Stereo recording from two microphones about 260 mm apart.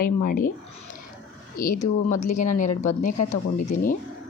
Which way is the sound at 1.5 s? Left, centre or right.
Left.